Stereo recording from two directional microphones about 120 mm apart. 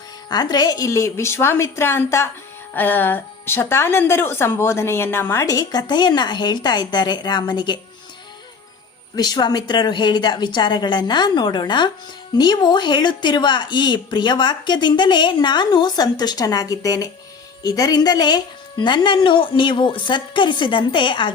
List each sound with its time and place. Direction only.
0.3 s a woman's voice: 35° left (ahead or behind)
9.1 s a woman's voice: 35° left (ahead or behind)